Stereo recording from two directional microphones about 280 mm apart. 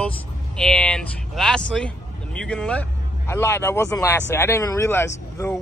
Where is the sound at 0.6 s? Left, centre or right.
Centre.